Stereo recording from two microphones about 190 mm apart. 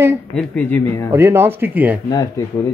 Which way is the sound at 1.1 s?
10° right (ahead or behind).